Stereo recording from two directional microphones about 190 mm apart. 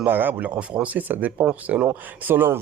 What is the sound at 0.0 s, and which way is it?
Speech, 10° right (ahead or behind).